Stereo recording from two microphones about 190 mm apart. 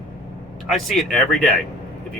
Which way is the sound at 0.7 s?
Centre (ahead or behind).